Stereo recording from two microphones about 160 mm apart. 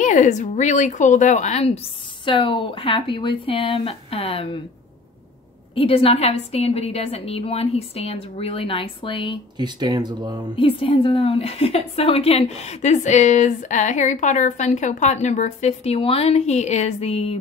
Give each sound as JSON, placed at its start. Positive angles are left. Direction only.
{"t": 0.0, "sound": "a woman's voice", "side_deg": 50}
{"t": 2.2, "sound": "a woman's voice", "side_deg": 30}
{"t": 5.8, "sound": "a woman's voice", "side_deg": 35}
{"t": 9.6, "sound": "speech", "side_deg": -25}
{"t": 10.5, "sound": "a woman's voice", "side_deg": 35}